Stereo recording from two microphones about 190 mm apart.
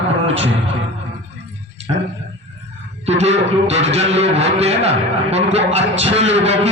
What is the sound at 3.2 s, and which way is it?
A man's voice, 35° right (ahead or behind).